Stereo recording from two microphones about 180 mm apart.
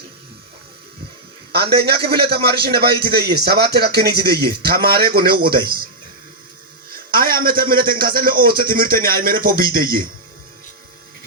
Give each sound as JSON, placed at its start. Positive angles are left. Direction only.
{"t": 1.7, "sound": "speech", "side_deg": -60}
{"t": 6.9, "sound": "a sound", "side_deg": -55}
{"t": 7.9, "sound": "speech", "side_deg": -55}